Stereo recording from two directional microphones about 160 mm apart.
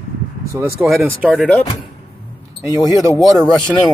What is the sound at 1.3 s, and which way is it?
Speech, 10° left (ahead or behind).